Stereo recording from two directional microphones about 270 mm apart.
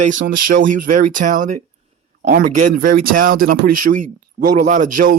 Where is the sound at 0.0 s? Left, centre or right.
Right.